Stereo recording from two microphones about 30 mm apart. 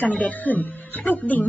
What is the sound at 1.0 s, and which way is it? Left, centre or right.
Speech, left.